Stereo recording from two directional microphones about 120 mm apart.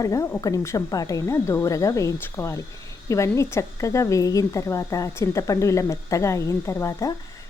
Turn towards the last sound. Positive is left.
turn(degrees=25)  # may be behind; listen again after turning